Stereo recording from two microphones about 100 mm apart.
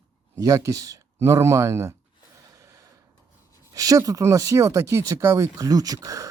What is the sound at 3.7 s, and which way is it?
Speech, 35° right (ahead or behind).